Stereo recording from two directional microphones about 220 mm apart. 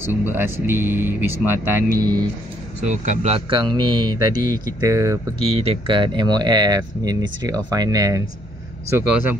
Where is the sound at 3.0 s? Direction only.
30° right (ahead or behind); by 5.2 s 15° right (ahead or behind).